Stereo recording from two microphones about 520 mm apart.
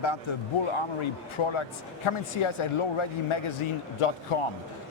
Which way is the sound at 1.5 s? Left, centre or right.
Left.